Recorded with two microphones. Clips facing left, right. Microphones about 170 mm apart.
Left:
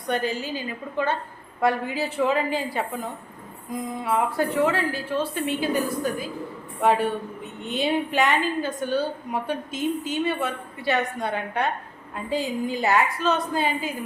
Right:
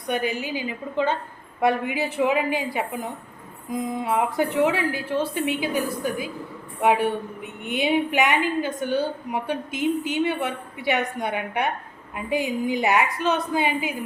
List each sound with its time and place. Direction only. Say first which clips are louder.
0.1 s a woman's voice: even; 15° right (ahead or behind)